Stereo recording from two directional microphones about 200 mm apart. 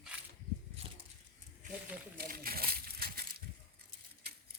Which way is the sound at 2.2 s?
45° right (ahead or behind).